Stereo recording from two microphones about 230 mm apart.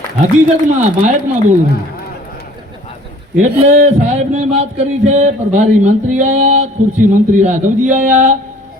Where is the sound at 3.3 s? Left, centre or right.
Right.